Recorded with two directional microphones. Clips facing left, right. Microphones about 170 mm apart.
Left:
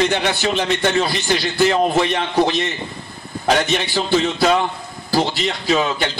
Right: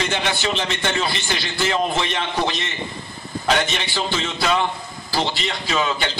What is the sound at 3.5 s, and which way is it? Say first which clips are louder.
A man's voice: left 4 dB; 45° left (ahead or behind).